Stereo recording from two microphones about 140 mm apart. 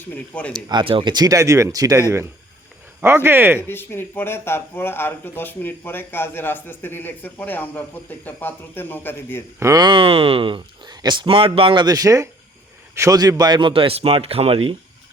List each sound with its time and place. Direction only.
0.1 s speech: 10° left (ahead or behind)
0.5 s speech: 35° right (ahead or behind); by 3.6 s 15° right (ahead or behind)
3.7 s speech: 15° left (ahead or behind)
9.6 s speech: 25° right (ahead or behind); by 14.8 s 45° right (ahead or behind)